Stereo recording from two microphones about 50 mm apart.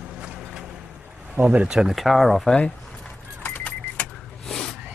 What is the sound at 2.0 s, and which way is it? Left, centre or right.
Speech, centre.